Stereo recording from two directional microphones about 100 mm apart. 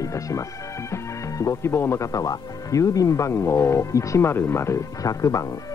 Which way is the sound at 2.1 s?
35° left (ahead or behind).